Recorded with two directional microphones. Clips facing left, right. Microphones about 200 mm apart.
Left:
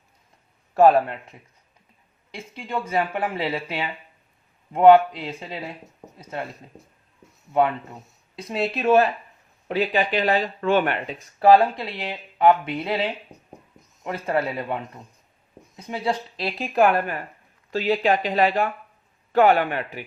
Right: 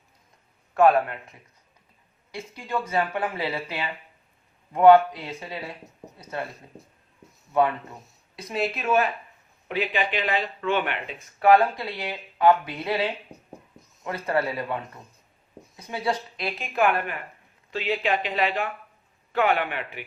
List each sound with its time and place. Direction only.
0.7 s speech: 35° left (ahead or behind)
2.7 s speech: 25° left (ahead or behind)
8.4 s speech: 30° left (ahead or behind)
15.9 s speech: 30° left (ahead or behind)